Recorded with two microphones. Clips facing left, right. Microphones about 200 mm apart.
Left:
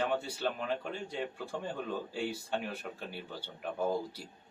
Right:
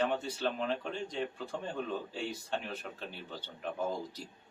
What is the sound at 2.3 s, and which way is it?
Speech, 10° left (ahead or behind).